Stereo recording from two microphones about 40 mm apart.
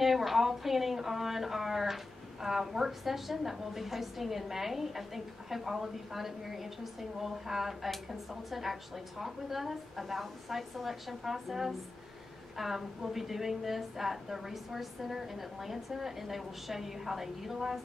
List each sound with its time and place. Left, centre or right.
0.0 s a woman's voice: centre